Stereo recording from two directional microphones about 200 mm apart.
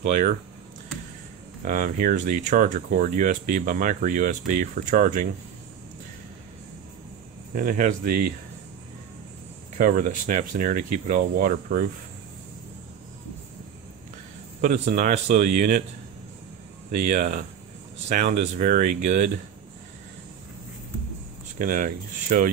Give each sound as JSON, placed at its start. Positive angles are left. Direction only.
{"t": 0.0, "sound": "speech", "side_deg": -40}
{"t": 1.6, "sound": "speech", "side_deg": -45}
{"t": 7.5, "sound": "speech", "side_deg": -45}
{"t": 9.8, "sound": "speech", "side_deg": -45}
{"t": 14.6, "sound": "speech", "side_deg": -40}
{"t": 16.9, "sound": "speech", "side_deg": -40}
{"t": 21.5, "sound": "speech", "side_deg": -40}